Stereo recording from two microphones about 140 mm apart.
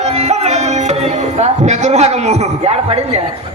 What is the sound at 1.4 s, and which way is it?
Speech, 55° right (ahead or behind).